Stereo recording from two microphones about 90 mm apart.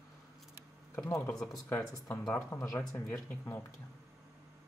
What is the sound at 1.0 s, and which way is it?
Speech, 30° left (ahead or behind).